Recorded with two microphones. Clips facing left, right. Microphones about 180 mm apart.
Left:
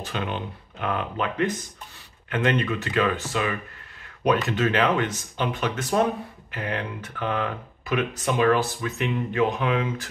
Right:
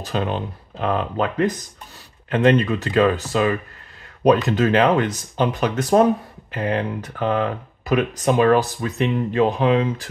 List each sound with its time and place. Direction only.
0.0 s speech: 35° right (ahead or behind)